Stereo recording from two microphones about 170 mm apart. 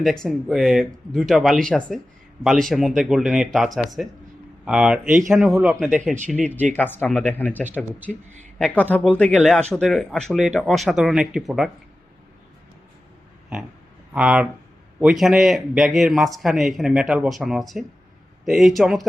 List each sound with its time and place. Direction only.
0.0 s speech: centre (ahead or behind)
5.0 s speech: 50° right (ahead or behind)
5.3 s speech: centre (ahead or behind)
6.7 s speech: 10° left (ahead or behind)
14.1 s speech: 5° right (ahead or behind)